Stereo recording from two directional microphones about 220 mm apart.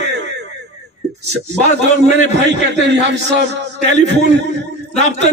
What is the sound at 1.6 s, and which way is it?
Speech, 5° left (ahead or behind).